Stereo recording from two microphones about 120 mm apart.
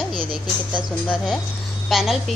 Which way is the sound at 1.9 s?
Centre (ahead or behind).